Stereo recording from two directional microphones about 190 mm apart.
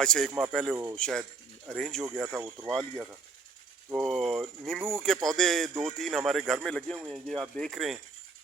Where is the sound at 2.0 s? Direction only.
15° right (ahead or behind).